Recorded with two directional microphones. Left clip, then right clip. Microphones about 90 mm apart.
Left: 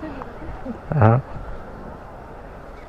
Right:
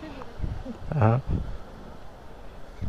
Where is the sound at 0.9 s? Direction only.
20° right (ahead or behind).